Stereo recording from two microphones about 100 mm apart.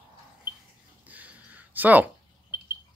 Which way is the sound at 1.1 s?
15° right (ahead or behind).